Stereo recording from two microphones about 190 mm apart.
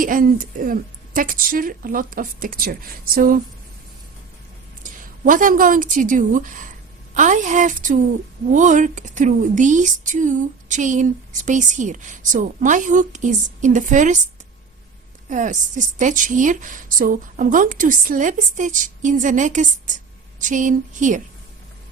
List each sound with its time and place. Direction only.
0.0 s a woman's voice: 45° right (ahead or behind)
4.8 s a woman's voice: 45° right (ahead or behind)
15.3 s a woman's voice: 40° right (ahead or behind)